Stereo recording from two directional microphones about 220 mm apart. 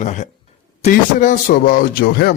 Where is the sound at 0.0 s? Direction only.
35° left (ahead or behind).